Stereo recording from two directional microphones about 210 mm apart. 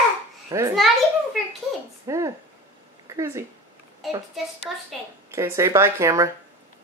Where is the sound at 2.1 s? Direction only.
15° right (ahead or behind).